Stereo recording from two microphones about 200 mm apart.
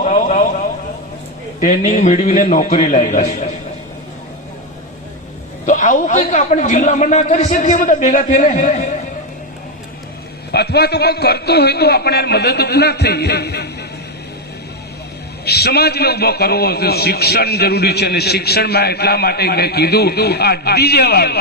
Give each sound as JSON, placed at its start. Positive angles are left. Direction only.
{"t": 0.0, "sound": "a sound", "side_deg": 35}
{"t": 1.6, "sound": "a man's voice", "side_deg": 35}
{"t": 5.6, "sound": "a man's voice", "side_deg": 40}
{"t": 10.5, "sound": "a man's voice", "side_deg": 55}
{"t": 15.4, "sound": "a man's voice", "side_deg": 55}